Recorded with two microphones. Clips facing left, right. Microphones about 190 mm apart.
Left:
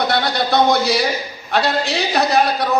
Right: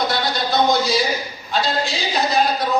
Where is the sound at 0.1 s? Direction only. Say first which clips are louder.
Left 3 dB; 60° left (ahead or behind).